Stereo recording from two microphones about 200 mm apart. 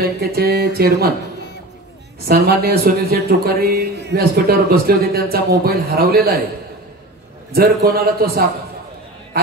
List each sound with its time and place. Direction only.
0.0 s speech: 50° right (ahead or behind)
2.2 s speech: 50° right (ahead or behind)
7.9 s speech: 50° right (ahead or behind)